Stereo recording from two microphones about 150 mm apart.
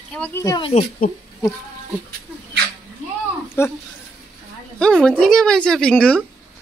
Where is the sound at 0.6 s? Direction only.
40° left (ahead or behind).